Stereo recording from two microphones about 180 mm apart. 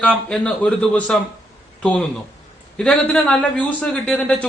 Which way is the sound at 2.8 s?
5° left (ahead or behind).